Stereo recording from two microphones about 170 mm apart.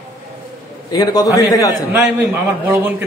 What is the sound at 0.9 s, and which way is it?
Speech, 20° left (ahead or behind).